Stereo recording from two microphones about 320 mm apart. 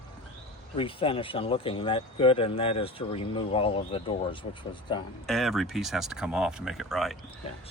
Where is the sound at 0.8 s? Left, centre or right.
Centre.